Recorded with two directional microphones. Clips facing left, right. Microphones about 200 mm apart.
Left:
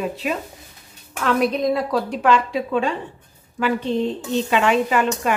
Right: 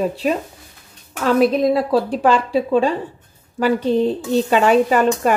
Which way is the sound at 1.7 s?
30° right (ahead or behind).